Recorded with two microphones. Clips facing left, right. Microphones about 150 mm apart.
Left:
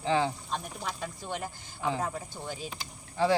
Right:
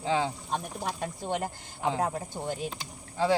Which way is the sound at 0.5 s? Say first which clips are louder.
Right 3 dB; 55° right (ahead or behind).